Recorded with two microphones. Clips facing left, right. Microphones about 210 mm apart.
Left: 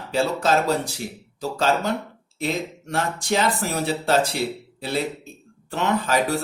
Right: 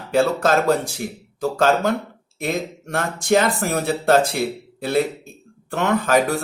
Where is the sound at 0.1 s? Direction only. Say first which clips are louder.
Right 3 dB; 50° right (ahead or behind).